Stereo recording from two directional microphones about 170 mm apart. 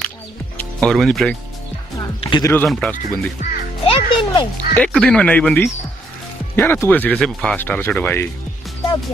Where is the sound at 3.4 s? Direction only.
45° left (ahead or behind).